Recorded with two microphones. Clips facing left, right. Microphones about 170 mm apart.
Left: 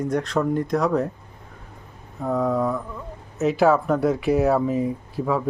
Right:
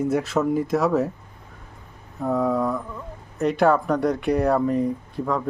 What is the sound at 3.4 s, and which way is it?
Speech, centre (ahead or behind).